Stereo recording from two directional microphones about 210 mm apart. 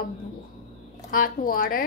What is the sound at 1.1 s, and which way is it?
Speech, 40° left (ahead or behind).